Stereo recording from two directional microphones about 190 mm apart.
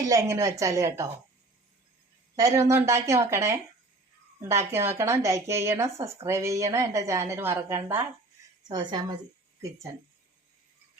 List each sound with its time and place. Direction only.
0.1 s speech: 15° right (ahead or behind)
2.3 s speech: 15° right (ahead or behind)
8.6 s a woman's voice: 20° right (ahead or behind)